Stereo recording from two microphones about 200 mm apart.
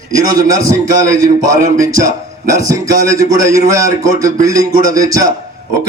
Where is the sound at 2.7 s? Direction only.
15° right (ahead or behind).